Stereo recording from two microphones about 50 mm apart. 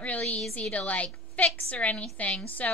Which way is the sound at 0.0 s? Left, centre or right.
Left.